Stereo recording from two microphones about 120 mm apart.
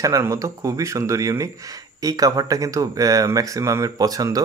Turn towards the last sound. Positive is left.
turn(degrees=-30)  # may be behind; listen again after turning